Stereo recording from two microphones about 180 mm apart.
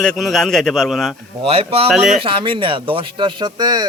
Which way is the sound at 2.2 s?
30° right (ahead or behind).